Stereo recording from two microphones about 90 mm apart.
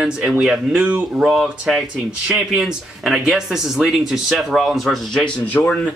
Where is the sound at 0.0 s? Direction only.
5° right (ahead or behind).